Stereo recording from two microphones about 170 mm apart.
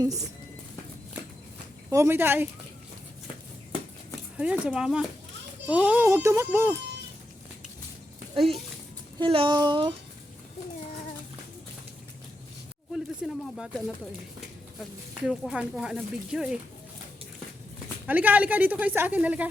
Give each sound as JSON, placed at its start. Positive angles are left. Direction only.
{"t": 0.0, "sound": "speech", "side_deg": -20}
{"t": 1.9, "sound": "speech", "side_deg": -15}
{"t": 4.4, "sound": "speech", "side_deg": -5}
{"t": 8.4, "sound": "speech", "side_deg": 0}
{"t": 9.1, "sound": "speech", "side_deg": -30}
{"t": 12.9, "sound": "speech", "side_deg": 0}
{"t": 15.3, "sound": "speech", "side_deg": -5}
{"t": 18.0, "sound": "speech", "side_deg": -10}